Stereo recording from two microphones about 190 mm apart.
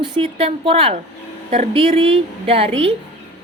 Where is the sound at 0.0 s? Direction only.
25° right (ahead or behind).